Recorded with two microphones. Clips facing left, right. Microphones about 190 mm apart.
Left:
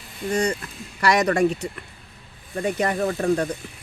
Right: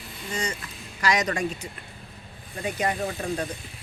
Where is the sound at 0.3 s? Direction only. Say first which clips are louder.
Left 9 dB; 60° left (ahead or behind).